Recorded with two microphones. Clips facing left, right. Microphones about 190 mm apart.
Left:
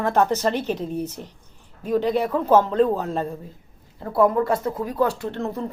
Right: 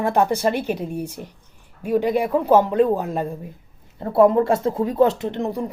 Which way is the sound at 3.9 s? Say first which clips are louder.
Right 4 dB; 25° right (ahead or behind).